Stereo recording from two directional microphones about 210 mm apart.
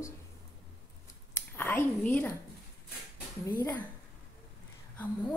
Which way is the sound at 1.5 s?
10° left (ahead or behind).